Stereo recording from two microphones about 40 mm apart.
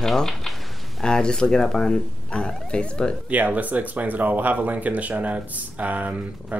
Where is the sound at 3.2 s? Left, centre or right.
Right.